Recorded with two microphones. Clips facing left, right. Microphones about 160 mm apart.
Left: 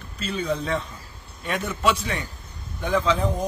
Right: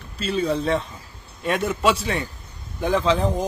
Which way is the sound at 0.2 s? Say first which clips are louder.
Right 4 dB; 30° right (ahead or behind).